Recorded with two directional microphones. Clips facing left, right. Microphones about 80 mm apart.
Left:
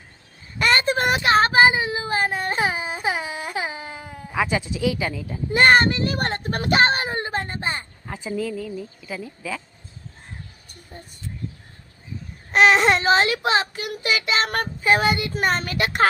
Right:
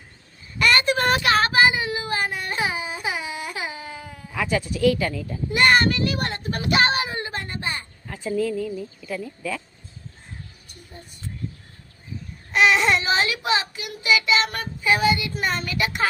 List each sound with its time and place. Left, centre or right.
0.6 s a sound: left; by 5.4 s centre
5.5 s a child's voice: left
8.3 s speech: centre
12.5 s speech: left